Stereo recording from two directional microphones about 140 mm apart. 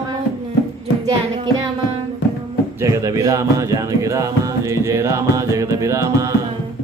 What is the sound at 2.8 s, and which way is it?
Music, 20° right (ahead or behind).